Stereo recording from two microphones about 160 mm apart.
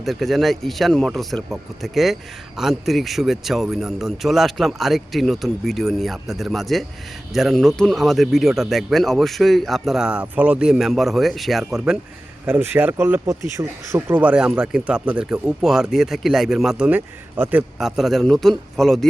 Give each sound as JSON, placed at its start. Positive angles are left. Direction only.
{"t": 0.0, "sound": "a man's voice", "side_deg": 0}
{"t": 12.5, "sound": "speech", "side_deg": -10}
{"t": 17.7, "sound": "a man's voice", "side_deg": 0}